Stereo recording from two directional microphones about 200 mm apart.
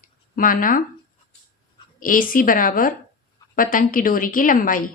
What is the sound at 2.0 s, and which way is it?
A woman's voice, 45° left (ahead or behind).